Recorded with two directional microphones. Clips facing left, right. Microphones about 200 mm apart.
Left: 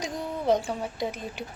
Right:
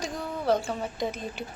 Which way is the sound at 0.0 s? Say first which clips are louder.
Left 1 dB; 15° left (ahead or behind).